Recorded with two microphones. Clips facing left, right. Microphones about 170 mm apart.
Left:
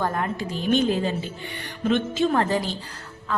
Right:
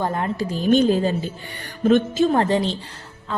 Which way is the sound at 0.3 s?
40° right (ahead or behind).